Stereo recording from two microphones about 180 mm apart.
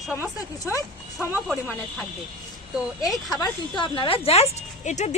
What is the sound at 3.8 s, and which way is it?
Speech, 30° left (ahead or behind).